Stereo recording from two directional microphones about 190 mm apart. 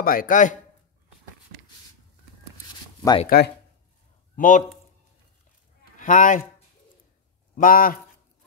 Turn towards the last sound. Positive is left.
turn(degrees=45)  # may be behind; listen again after turning